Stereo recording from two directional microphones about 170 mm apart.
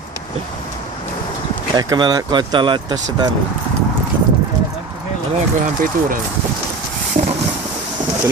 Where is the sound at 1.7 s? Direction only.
25° right (ahead or behind).